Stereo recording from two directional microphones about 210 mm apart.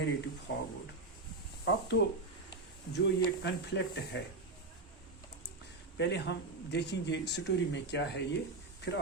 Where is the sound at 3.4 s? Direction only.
55° left (ahead or behind).